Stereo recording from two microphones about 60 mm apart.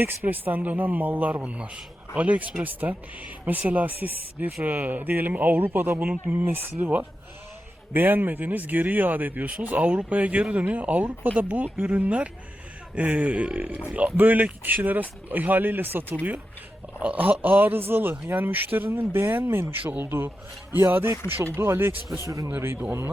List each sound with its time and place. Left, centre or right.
0.0 s speech: right
17.0 s speech: right
19.8 s speech: right